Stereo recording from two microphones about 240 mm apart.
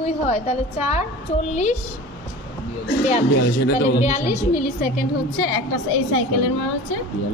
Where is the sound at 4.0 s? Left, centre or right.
Left.